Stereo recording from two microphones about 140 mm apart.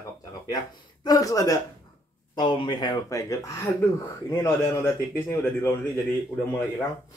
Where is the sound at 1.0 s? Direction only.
25° left (ahead or behind).